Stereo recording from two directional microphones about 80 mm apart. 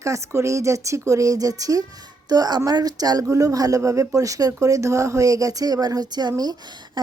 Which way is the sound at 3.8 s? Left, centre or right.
Right.